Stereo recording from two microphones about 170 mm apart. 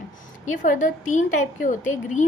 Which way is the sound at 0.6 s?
50° left (ahead or behind).